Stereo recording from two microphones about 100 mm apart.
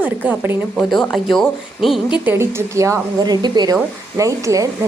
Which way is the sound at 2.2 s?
20° right (ahead or behind).